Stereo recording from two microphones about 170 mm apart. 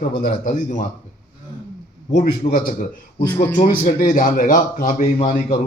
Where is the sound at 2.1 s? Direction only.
45° left (ahead or behind).